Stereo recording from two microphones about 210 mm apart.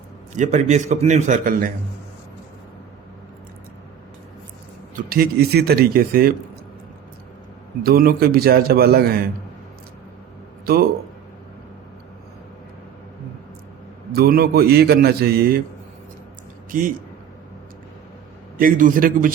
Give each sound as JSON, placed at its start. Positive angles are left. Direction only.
{"t": 0.3, "sound": "a man's voice", "side_deg": -35}
{"t": 4.9, "sound": "a man's voice", "side_deg": -45}
{"t": 7.9, "sound": "a man's voice", "side_deg": -45}
{"t": 14.1, "sound": "a man's voice", "side_deg": -45}
{"t": 18.5, "sound": "a man's voice", "side_deg": -40}